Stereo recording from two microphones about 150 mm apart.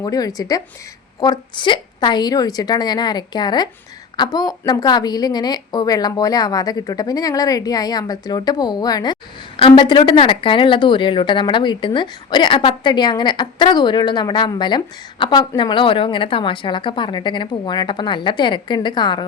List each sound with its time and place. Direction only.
0.0 s a woman's voice: 25° left (ahead or behind)